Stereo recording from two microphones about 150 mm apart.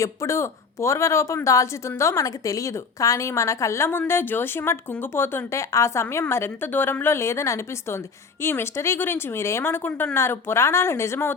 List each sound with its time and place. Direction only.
0.0 s a woman's voice: 20° left (ahead or behind)